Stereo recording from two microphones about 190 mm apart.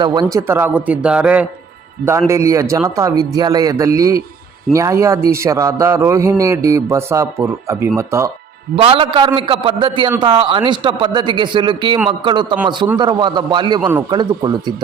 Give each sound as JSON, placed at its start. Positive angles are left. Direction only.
{"t": 0.0, "sound": "a man's voice", "side_deg": -20}
{"t": 8.7, "sound": "a man's voice", "side_deg": -30}